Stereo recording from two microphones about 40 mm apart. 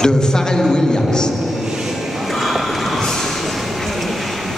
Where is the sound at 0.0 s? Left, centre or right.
Centre.